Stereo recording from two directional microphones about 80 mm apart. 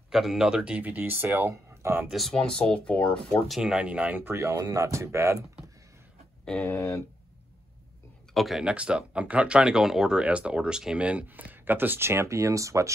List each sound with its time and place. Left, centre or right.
0.1 s speech: centre; by 2.0 s right
2.0 s speech: centre
3.4 s speech: centre
4.2 s speech: right
6.4 s speech: centre
6.7 s speech: left
8.3 s speech: centre
8.6 s speech: centre; by 12.9 s right